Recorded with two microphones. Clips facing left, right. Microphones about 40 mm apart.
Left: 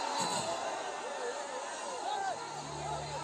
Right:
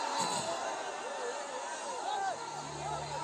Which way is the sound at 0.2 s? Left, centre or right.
Left.